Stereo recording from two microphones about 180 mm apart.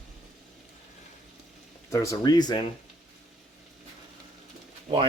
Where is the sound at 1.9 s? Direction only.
15° left (ahead or behind).